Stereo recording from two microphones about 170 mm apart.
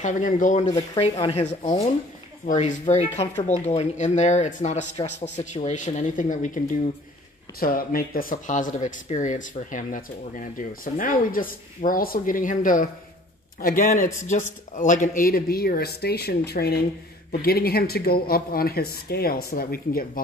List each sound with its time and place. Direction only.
0.0 s speech: 50° left (ahead or behind)
7.6 s speech: 60° left (ahead or behind)